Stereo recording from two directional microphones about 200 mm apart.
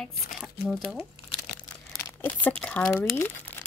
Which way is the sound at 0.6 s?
5° left (ahead or behind).